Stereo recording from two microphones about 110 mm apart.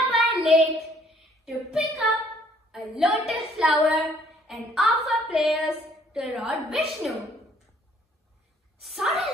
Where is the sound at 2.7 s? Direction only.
5° right (ahead or behind).